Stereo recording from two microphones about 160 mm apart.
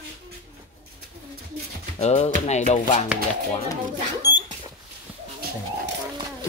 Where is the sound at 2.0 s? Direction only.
40° left (ahead or behind).